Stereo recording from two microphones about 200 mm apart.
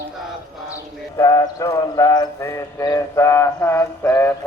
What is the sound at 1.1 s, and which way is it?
Clip-clop, 20° left (ahead or behind).